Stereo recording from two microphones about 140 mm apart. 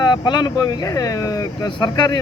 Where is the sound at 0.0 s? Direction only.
30° left (ahead or behind).